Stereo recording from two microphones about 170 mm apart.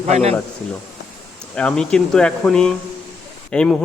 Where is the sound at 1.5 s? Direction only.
5° left (ahead or behind).